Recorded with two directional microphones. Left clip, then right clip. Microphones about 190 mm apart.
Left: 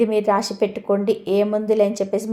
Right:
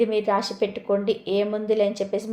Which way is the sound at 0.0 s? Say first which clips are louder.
Left 3 dB; 40° left (ahead or behind).